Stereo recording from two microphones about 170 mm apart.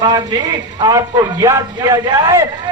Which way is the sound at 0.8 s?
25° right (ahead or behind).